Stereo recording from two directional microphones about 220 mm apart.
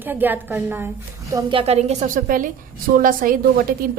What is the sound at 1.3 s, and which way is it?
A woman's voice, 20° right (ahead or behind).